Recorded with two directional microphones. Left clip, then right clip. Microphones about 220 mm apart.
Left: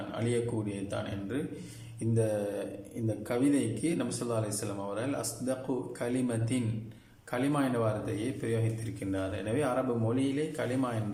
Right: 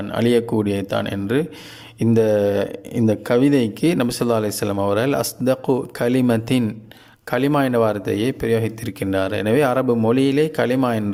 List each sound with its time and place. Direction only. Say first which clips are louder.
0.1 s speech: right 15 dB; 45° right (ahead or behind)